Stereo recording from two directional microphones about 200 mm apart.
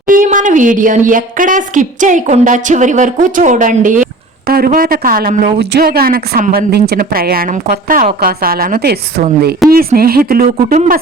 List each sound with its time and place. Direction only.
0.1 s a woman's voice: 40° right (ahead or behind)
5.5 s speech: 55° right (ahead or behind)